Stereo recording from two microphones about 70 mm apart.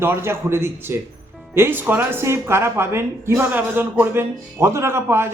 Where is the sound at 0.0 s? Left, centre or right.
Right.